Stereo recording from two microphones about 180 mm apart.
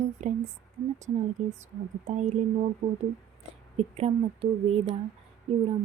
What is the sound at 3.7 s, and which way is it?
Speech, 35° right (ahead or behind).